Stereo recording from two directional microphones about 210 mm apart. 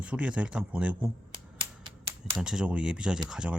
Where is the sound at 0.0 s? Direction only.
5° right (ahead or behind).